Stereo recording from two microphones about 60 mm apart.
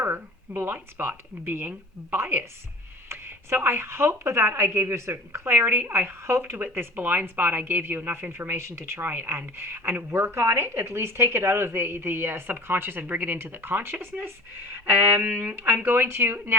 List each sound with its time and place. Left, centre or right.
0.0 s a woman's voice: right
15.2 s a woman's voice: right